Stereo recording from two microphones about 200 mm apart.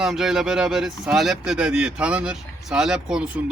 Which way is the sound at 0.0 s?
Centre (ahead or behind).